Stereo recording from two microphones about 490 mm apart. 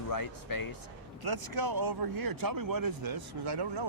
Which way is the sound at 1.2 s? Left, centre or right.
Right.